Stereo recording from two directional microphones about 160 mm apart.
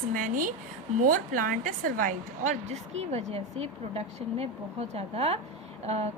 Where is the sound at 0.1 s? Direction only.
55° right (ahead or behind).